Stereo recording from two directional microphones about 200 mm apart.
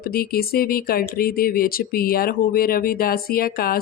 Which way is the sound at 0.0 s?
50° left (ahead or behind).